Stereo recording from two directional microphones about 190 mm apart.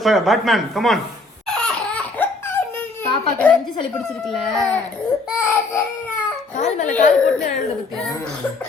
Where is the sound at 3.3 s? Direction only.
10° left (ahead or behind).